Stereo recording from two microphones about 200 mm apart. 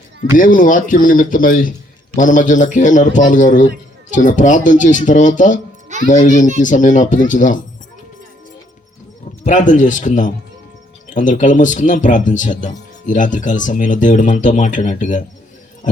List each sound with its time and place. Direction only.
0.3 s speech: 45° left (ahead or behind)
9.4 s speech: 40° left (ahead or behind)